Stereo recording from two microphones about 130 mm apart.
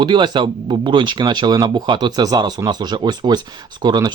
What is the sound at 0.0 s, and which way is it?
Speech, 35° right (ahead or behind).